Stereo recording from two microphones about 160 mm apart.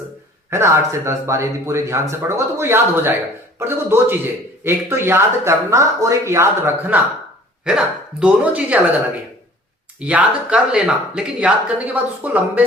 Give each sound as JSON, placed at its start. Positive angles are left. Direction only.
{"t": 0.5, "sound": "speech", "side_deg": -15}
{"t": 10.0, "sound": "speech", "side_deg": -10}